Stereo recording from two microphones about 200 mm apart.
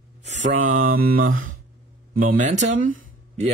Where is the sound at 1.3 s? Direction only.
80° right.